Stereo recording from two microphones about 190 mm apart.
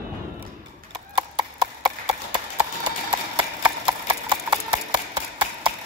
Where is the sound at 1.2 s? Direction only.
20° right (ahead or behind).